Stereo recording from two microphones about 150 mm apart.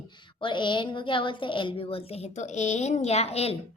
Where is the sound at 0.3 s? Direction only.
30° left (ahead or behind).